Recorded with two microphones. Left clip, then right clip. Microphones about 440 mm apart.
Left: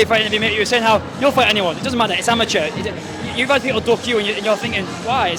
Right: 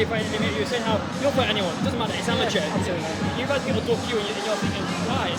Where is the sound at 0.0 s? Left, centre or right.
Left.